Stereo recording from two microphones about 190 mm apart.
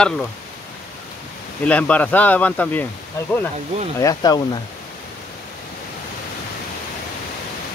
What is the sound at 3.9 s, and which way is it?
Speech, 20° left (ahead or behind).